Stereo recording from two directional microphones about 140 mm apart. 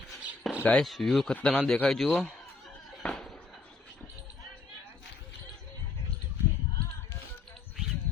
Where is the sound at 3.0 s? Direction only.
5° left (ahead or behind).